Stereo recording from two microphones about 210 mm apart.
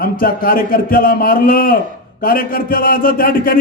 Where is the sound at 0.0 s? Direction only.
45° left (ahead or behind).